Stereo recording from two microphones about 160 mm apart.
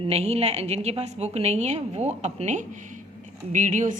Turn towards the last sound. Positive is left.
turn(degrees=-50)  # may be behind; listen again after turning